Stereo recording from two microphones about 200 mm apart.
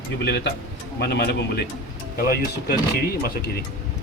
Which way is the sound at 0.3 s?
55° left (ahead or behind).